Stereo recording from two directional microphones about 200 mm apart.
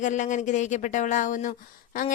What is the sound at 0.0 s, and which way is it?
Speech, 40° left (ahead or behind).